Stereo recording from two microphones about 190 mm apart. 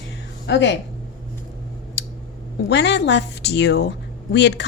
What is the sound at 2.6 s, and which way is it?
A woman's voice, 65° left (ahead or behind).